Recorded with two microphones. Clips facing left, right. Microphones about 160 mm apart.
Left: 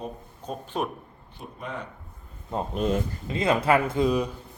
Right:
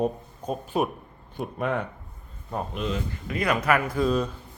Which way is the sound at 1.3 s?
65° right (ahead or behind).